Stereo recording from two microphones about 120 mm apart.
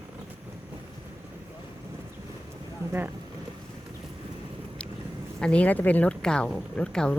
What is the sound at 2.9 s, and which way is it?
Speech, 15° right (ahead or behind).